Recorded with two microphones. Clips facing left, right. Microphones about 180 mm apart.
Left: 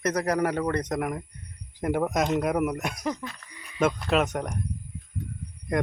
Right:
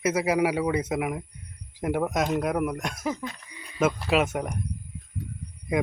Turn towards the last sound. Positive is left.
turn(degrees=-5)  # may be behind; listen again after turning